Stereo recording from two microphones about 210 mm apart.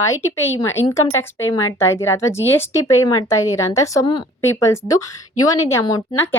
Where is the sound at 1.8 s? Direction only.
10° left (ahead or behind).